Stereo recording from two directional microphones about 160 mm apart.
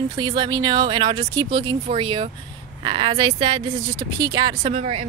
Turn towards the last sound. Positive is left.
turn(degrees=-40)  # may be behind; listen again after turning